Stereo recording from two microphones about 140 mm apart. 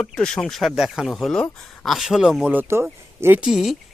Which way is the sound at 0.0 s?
5° left (ahead or behind).